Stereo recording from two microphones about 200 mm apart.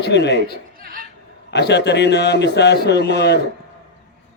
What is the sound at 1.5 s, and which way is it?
A man's voice, 55° left (ahead or behind).